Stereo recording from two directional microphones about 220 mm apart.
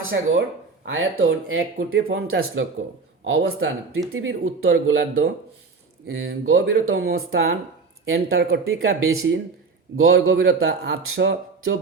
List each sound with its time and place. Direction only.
0.1 s speech: 50° right (ahead or behind)
0.9 s a man's voice: 65° right (ahead or behind)
2.3 s a man's voice: 55° right (ahead or behind)